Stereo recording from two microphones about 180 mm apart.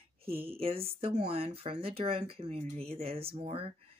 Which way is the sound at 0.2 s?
30° right (ahead or behind).